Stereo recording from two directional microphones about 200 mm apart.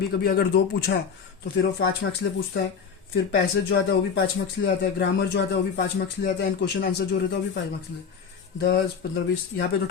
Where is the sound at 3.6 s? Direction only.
60° left (ahead or behind).